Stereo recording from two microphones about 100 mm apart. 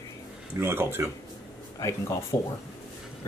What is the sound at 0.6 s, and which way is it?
Speech, 25° right (ahead or behind).